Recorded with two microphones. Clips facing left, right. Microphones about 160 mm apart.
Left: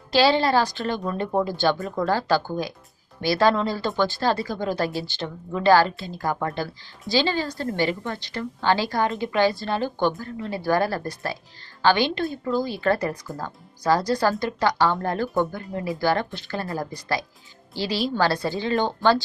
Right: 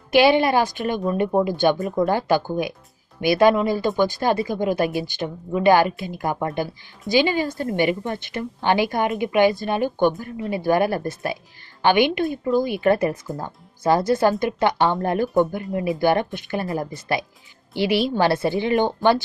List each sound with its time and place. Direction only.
0.1 s speech: 20° right (ahead or behind)